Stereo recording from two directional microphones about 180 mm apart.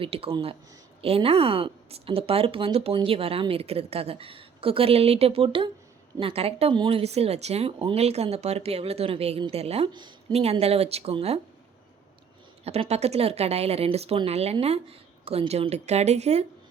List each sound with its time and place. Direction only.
0.0 s speech: 30° right (ahead or behind)
12.6 s speech: 35° right (ahead or behind)